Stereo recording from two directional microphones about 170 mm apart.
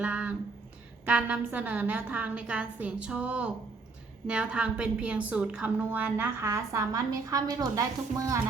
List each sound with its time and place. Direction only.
0.0 s a woman's voice: 10° right (ahead or behind)